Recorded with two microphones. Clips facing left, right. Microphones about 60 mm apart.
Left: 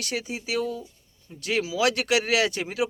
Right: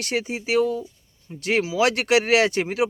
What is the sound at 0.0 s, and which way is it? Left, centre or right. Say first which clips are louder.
Speech: right 5 dB; right.